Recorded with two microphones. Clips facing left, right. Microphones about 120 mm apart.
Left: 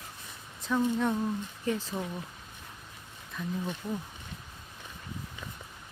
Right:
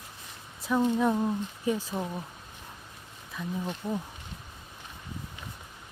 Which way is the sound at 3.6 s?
20° right (ahead or behind).